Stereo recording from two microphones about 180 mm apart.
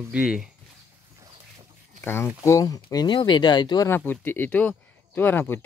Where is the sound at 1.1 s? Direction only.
20° right (ahead or behind).